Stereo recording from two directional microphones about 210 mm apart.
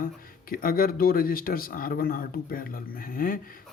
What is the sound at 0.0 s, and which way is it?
Speech, 45° left (ahead or behind).